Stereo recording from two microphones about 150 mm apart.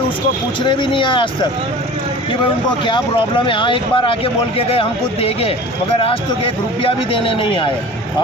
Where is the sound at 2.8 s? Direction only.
35° left (ahead or behind).